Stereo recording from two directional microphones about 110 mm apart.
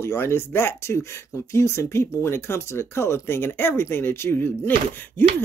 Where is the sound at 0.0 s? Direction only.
20° left (ahead or behind).